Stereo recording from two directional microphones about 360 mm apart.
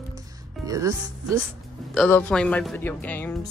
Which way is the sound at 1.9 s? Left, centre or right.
Centre.